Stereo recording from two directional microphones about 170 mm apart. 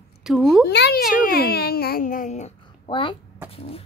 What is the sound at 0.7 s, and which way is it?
A child's voice, 80° left.